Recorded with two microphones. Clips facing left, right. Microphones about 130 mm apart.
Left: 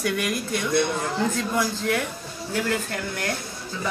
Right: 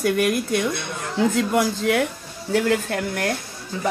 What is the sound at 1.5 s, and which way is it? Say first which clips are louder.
A woman's voice: right 4 dB; 65° right (ahead or behind).